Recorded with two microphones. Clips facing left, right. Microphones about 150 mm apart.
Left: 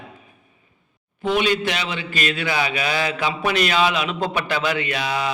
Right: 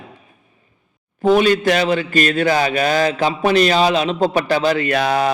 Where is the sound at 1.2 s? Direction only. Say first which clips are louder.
Right 7 dB; 40° right (ahead or behind).